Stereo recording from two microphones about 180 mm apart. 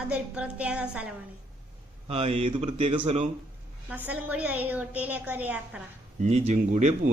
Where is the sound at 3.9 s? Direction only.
10° right (ahead or behind).